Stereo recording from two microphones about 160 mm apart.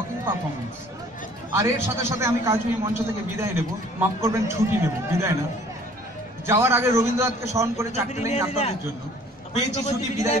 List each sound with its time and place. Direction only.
1.5 s a man's voice: 15° right (ahead or behind)
6.4 s a man's voice: 15° right (ahead or behind)
7.9 s a man's voice: 45° left (ahead or behind)